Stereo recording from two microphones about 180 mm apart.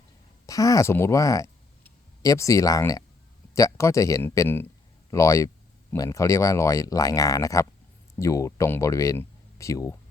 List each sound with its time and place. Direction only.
0.4 s speech: 20° left (ahead or behind)